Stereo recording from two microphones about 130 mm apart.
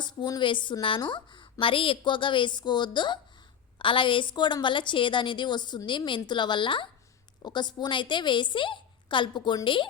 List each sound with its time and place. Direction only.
0.0 s a woman's voice: 35° left (ahead or behind)